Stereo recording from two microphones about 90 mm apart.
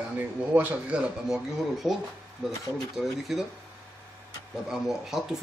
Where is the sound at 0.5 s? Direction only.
20° right (ahead or behind); by 2.0 s 5° right (ahead or behind).